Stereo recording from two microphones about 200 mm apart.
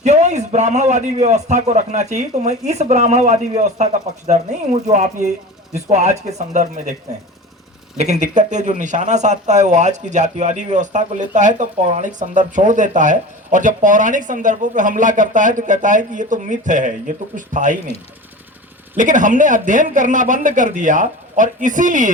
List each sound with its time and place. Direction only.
0.0 s speech: 35° right (ahead or behind)
7.9 s speech: 35° right (ahead or behind)
18.9 s speech: 40° right (ahead or behind)